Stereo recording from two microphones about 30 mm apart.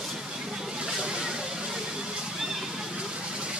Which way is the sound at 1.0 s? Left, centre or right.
Right.